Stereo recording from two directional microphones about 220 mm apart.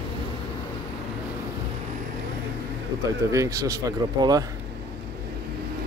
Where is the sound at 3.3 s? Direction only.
15° right (ahead or behind).